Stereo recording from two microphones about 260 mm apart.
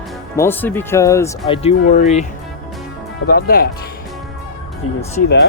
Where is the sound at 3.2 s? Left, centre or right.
Left.